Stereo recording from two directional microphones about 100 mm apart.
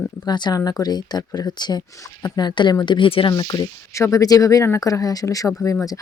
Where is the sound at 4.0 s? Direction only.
30° left (ahead or behind).